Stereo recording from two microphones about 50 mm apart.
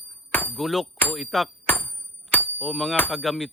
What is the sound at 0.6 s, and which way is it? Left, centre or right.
Speech, centre.